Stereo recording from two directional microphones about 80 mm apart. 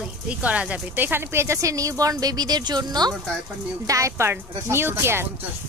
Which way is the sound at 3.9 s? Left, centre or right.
Right.